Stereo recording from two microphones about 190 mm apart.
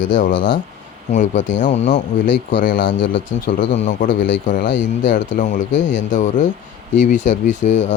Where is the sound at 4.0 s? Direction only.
45° left (ahead or behind).